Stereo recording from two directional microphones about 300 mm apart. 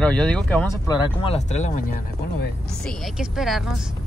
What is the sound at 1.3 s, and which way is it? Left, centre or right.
Speech, left.